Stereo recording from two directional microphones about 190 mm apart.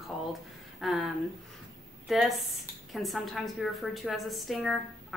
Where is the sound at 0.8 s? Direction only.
Centre (ahead or behind).